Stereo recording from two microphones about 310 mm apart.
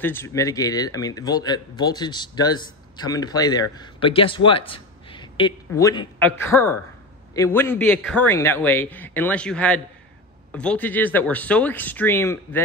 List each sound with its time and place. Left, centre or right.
0.0 s a man's voice: centre